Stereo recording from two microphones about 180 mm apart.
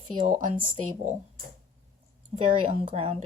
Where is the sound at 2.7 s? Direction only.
35° right (ahead or behind).